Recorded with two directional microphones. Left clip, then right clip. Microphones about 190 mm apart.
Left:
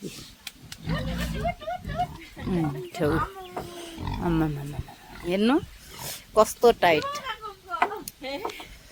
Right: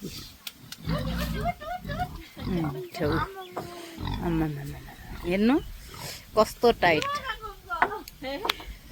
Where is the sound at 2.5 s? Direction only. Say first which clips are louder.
Left 2 dB; 25° left (ahead or behind).